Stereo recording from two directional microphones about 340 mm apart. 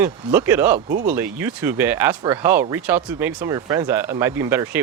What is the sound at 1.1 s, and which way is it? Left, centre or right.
Speech, centre.